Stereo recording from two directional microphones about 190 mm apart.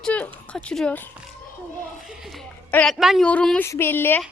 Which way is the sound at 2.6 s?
10° left (ahead or behind).